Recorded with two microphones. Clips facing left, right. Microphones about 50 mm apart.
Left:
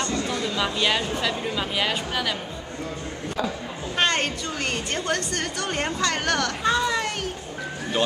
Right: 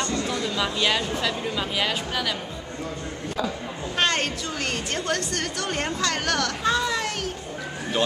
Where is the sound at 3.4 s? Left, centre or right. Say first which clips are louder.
Even; centre.